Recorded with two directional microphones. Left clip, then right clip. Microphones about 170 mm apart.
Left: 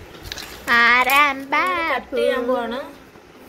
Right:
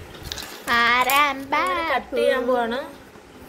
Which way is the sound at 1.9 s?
35° right (ahead or behind).